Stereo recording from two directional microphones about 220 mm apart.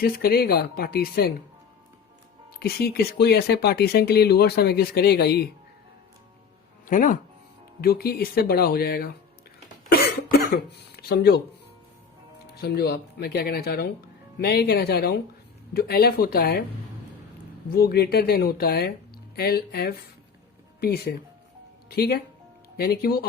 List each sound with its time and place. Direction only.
0.0 s speech: 45° left (ahead or behind)
2.6 s speech: 45° left (ahead or behind)
6.8 s speech: 35° left (ahead or behind)
10.3 s speech: 45° left (ahead or behind)
12.5 s speech: 45° left (ahead or behind)
17.7 s speech: 45° left (ahead or behind)